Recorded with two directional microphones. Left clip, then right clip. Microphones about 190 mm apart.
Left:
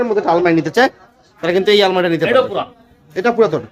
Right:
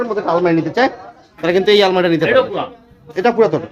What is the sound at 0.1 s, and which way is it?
Speech, 35° left (ahead or behind).